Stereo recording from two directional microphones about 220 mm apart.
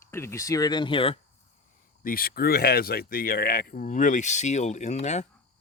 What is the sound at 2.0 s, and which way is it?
Speech, 40° left (ahead or behind).